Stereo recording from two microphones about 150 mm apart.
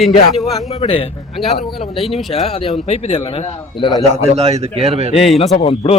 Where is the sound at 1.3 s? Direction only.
Centre (ahead or behind).